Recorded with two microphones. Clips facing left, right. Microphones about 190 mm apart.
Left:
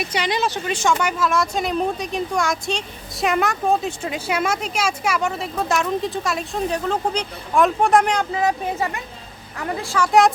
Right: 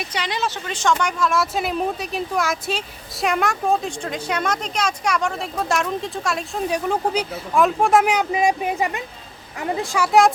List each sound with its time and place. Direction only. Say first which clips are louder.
0.0 s speech: left 3 dB; 10° left (ahead or behind)
6.7 s speech: right 2 dB; 10° right (ahead or behind)
10.1 s speech: even; centre (ahead or behind)